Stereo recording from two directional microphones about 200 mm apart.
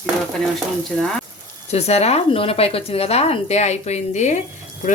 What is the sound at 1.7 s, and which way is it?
Speech, 30° left (ahead or behind).